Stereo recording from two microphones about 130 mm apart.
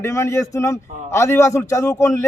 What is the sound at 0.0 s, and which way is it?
A man's voice, 20° left (ahead or behind).